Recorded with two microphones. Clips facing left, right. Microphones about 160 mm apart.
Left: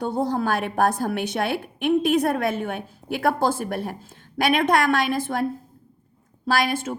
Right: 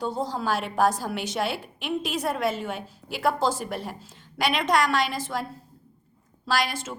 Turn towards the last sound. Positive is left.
turn(degrees=55)  # may be behind; listen again after turning